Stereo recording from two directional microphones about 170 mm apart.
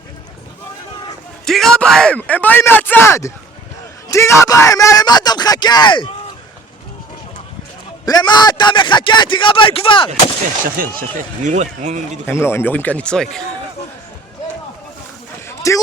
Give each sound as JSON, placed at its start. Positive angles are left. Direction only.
{"t": 1.5, "sound": "a man's voice", "side_deg": 0}
{"t": 8.0, "sound": "a man's voice", "side_deg": 25}
{"t": 10.8, "sound": "speech", "side_deg": -55}
{"t": 11.4, "sound": "a man's voice", "side_deg": -45}
{"t": 12.2, "sound": "speech", "side_deg": 15}
{"t": 15.4, "sound": "a sound", "side_deg": 20}